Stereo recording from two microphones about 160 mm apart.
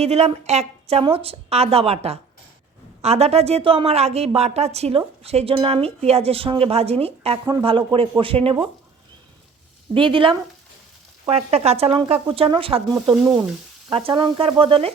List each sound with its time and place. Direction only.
0.0 s a woman's voice: 40° right (ahead or behind)
9.9 s a woman's voice: 30° right (ahead or behind)